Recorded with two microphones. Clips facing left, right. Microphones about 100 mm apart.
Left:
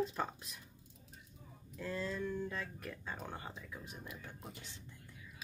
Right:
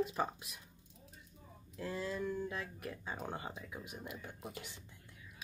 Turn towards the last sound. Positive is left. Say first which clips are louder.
# right 3 dB
turn(degrees=-15)  # may be behind; listen again after turning